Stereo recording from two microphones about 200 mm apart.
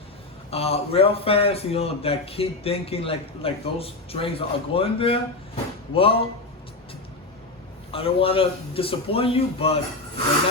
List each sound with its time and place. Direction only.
0.5 s a man's voice: 30° left (ahead or behind)
7.9 s a man's voice: 30° left (ahead or behind)